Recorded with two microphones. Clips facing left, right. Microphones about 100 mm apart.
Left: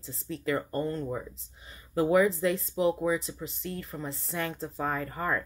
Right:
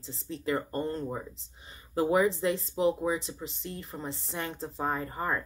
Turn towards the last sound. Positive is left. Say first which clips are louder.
# left 1 dB
turn(degrees=-20)  # may be behind; listen again after turning